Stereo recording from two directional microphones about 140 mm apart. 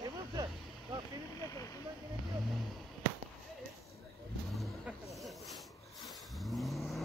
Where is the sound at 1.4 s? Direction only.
25° left (ahead or behind).